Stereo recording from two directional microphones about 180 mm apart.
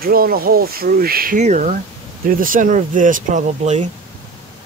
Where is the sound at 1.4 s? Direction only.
40° right (ahead or behind).